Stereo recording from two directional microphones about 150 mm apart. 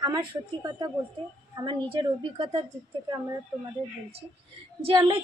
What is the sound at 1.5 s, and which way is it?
A woman's voice, 30° right (ahead or behind).